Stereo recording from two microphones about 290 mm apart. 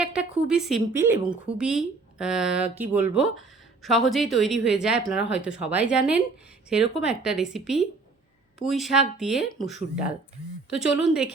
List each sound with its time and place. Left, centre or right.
0.0 s a woman's voice: centre
9.4 s speech: left
10.7 s a woman's voice: centre